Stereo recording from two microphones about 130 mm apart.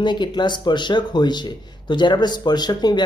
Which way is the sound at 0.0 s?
35° left (ahead or behind).